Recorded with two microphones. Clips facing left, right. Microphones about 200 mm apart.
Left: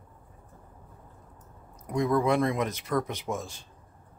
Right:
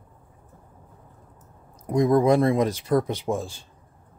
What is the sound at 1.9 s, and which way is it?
Speech, 35° right (ahead or behind).